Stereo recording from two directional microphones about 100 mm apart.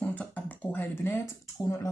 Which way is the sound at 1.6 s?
35° left (ahead or behind).